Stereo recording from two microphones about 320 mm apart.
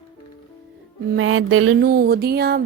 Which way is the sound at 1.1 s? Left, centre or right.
Right.